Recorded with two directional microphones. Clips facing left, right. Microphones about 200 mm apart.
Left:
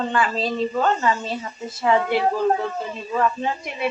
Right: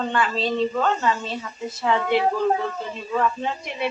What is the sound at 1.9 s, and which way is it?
Speech, 5° left (ahead or behind).